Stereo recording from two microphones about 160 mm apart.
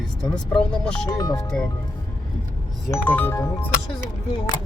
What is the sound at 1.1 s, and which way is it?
Speech, 25° left (ahead or behind).